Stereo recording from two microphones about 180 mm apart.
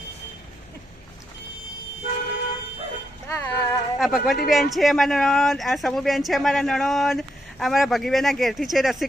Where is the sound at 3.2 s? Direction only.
15° left (ahead or behind).